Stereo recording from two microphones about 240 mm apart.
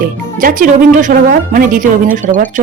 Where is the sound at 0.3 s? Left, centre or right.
Right.